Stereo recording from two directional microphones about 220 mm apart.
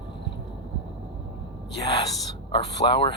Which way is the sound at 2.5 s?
25° left (ahead or behind).